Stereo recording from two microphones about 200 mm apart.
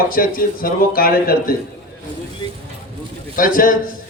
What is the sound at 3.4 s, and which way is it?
Speech, 45° left (ahead or behind).